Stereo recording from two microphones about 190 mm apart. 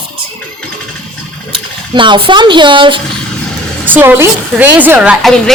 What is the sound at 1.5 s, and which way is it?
Speech, 25° right (ahead or behind).